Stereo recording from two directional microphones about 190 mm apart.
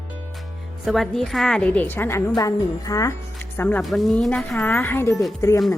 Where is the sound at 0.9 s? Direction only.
Centre (ahead or behind).